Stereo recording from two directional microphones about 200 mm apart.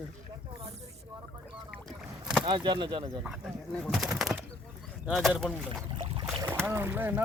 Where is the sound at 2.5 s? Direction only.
25° right (ahead or behind).